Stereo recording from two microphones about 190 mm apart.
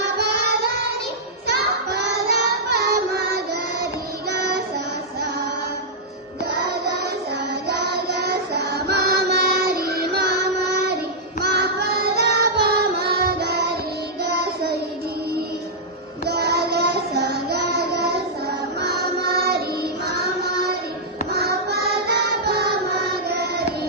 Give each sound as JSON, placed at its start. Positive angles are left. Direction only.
{"t": 0.2, "sound": "music", "side_deg": -55}
{"t": 1.5, "sound": "child singing", "side_deg": -55}
{"t": 6.4, "sound": "music", "side_deg": -55}
{"t": 11.3, "sound": "child singing", "side_deg": -55}
{"t": 16.2, "sound": "child singing", "side_deg": -60}
{"t": 18.8, "sound": "music", "side_deg": -55}